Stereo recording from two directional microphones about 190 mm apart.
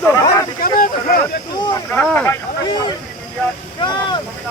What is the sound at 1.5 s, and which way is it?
Speech, 25° left (ahead or behind).